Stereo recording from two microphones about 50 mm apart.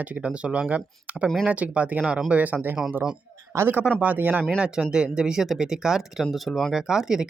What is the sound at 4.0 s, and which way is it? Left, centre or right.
Speech, right.